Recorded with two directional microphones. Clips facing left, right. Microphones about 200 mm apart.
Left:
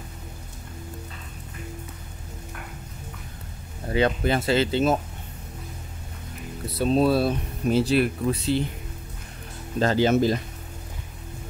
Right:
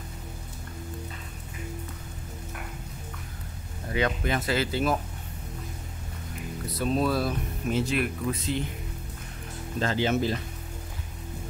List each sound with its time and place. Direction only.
3.9 s speech: 30° left (ahead or behind)
6.7 s speech: 30° left (ahead or behind)
9.8 s speech: 40° left (ahead or behind)